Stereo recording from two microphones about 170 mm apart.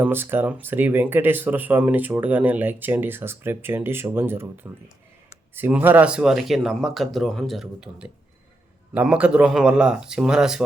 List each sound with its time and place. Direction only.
0.0 s speech: 10° right (ahead or behind)